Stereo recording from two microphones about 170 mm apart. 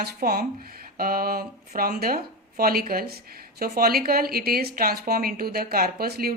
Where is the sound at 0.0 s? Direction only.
60° right (ahead or behind).